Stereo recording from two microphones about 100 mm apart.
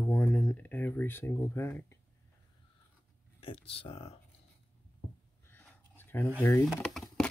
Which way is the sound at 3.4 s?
70° left (ahead or behind).